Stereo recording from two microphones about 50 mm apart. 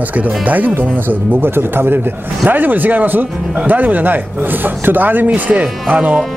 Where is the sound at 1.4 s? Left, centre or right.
Right.